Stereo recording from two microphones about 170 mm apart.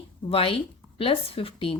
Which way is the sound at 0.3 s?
30° left (ahead or behind).